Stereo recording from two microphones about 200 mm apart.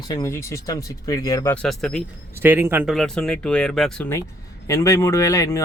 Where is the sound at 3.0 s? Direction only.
Centre (ahead or behind).